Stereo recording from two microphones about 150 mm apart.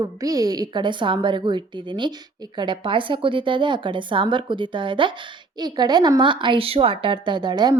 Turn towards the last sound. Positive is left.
turn(degrees=-30)  # may be behind; listen again after turning